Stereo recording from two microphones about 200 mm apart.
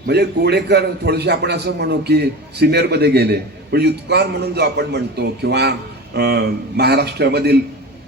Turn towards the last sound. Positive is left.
turn(degrees=-55)  # may be behind; listen again after turning